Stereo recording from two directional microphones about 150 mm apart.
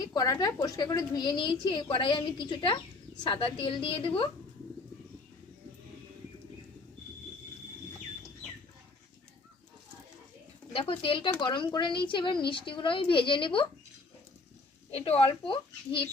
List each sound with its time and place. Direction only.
0.0 s a woman's voice: 25° left (ahead or behind)
10.7 s a woman's voice: 40° left (ahead or behind)
14.8 s a woman's voice: 40° left (ahead or behind)